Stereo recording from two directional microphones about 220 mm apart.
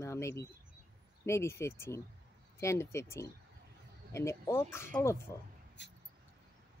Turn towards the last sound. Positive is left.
turn(degrees=55)  # may be behind; listen again after turning